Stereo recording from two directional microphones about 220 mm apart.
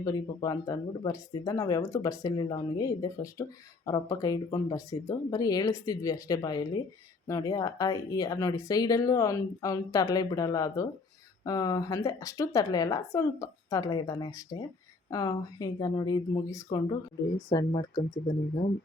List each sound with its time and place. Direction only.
0.0 s a woman's voice: 15° left (ahead or behind)